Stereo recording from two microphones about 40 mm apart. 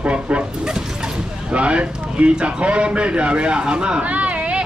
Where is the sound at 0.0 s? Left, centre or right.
Right.